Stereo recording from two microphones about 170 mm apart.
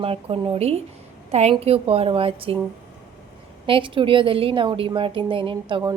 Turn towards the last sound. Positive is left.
turn(degrees=-30)  # may be behind; listen again after turning